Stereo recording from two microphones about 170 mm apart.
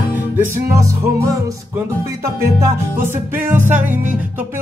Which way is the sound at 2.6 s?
15° right (ahead or behind).